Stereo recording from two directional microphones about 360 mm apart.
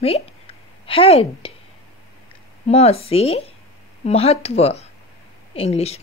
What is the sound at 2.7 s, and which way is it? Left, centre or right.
Speech, centre.